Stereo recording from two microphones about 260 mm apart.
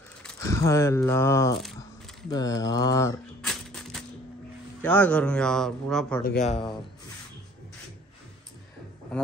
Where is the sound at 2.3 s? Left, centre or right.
Centre.